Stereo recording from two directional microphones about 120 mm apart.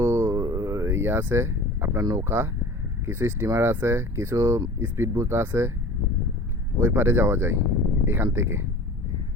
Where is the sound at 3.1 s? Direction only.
20° right (ahead or behind).